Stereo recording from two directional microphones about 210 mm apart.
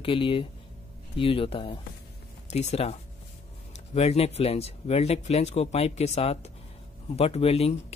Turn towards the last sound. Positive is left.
turn(degrees=30)  # may be behind; listen again after turning